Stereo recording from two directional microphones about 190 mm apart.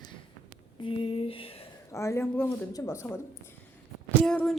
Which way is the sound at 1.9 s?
15° left (ahead or behind).